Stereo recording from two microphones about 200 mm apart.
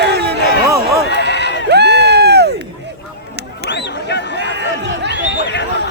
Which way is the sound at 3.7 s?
60° left (ahead or behind).